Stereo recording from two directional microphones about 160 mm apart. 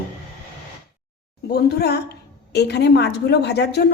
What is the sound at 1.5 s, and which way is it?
A woman's voice, 85° left.